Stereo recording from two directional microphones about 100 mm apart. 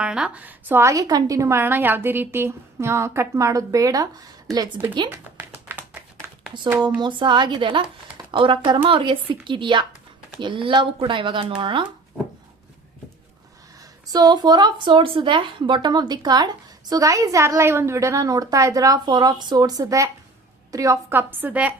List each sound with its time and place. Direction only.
0.0 s a woman's voice: 10° right (ahead or behind)
0.9 s a woman's voice: 35° right (ahead or behind)
5.1 s tap: 25° right (ahead or behind)
7.0 s a woman's voice: 50° right (ahead or behind)
14.1 s a woman's voice: 40° right (ahead or behind)
21.1 s a woman's voice: 20° right (ahead or behind)